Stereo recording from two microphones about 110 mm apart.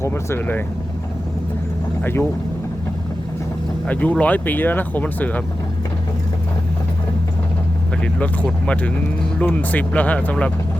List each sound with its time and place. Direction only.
0.0 s speech: 25° left (ahead or behind)
3.8 s speech: 15° left (ahead or behind)
8.0 s speech: 10° left (ahead or behind)